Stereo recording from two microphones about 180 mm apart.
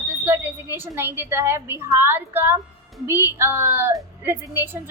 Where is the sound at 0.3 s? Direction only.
15° right (ahead or behind).